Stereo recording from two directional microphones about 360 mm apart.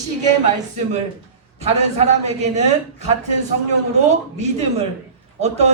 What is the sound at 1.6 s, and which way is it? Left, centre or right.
A man's voice, centre.